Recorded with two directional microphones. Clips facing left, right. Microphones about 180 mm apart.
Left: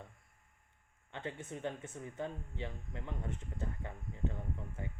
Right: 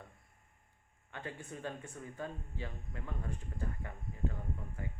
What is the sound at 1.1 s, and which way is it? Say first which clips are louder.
Speech: left 2 dB; 25° left (ahead or behind).